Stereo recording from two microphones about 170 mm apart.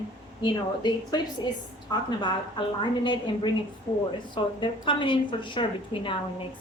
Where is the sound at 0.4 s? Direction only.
25° left (ahead or behind).